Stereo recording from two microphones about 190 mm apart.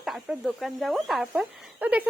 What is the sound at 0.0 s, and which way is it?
Speech, centre (ahead or behind).